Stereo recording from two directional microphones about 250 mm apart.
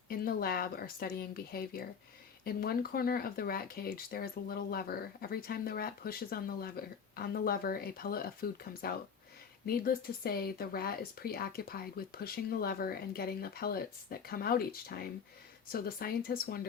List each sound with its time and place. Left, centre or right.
0.1 s speech: left